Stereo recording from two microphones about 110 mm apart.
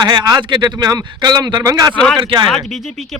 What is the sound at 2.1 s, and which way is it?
Speech, 45° right (ahead or behind).